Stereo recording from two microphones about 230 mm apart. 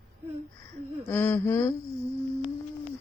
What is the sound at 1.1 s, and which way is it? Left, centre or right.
Speech, centre.